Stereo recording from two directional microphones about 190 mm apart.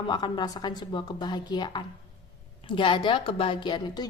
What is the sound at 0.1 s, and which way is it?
A woman's voice, 20° left (ahead or behind).